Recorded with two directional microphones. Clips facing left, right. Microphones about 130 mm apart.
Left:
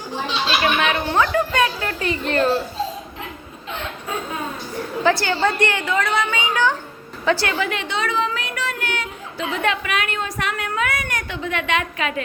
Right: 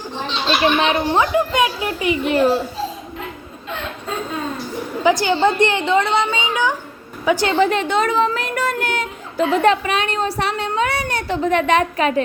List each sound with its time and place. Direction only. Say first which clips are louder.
0.6 s a woman's voice: right 5 dB; 25° right (ahead or behind)
1.0 s speech: right 2 dB; 15° right (ahead or behind)
5.0 s a woman's voice: right 4 dB; 15° right (ahead or behind)
7.4 s a woman's voice: right 7 dB; 35° right (ahead or behind)